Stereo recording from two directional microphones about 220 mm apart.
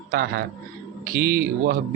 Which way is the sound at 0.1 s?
45° right (ahead or behind).